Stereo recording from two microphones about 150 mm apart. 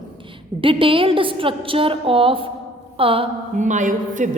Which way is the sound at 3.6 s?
55° right (ahead or behind).